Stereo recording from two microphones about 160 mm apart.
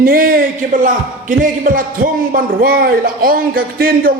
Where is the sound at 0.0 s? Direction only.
60° right (ahead or behind).